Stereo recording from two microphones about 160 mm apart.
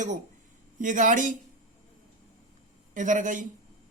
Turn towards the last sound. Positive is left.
turn(degrees=-55)  # may be behind; listen again after turning